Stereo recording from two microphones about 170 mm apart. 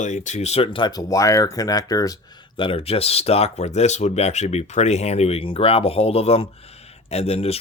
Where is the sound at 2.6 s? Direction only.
30° left (ahead or behind).